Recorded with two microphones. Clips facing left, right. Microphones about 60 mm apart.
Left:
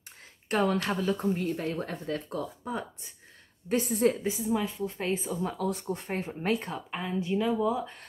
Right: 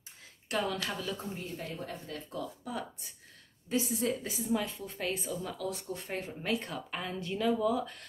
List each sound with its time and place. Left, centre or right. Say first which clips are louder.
0.5 s speech: left 6 dB; left
1.1 s speech: left 10 dB; left
2.7 s speech: left 4 dB; left
3.6 s speech: left 6 dB; left
4.4 s speech: left 4 dB; centre
5.3 s speech: left 5 dB; left
6.9 s speech: left 8 dB; centre